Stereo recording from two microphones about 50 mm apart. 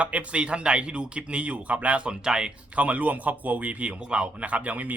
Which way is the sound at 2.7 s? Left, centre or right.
Right.